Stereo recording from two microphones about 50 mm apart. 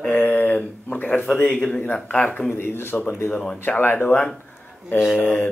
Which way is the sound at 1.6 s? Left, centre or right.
Centre.